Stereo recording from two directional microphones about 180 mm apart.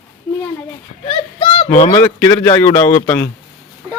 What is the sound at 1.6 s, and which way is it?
Speech, 45° left (ahead or behind).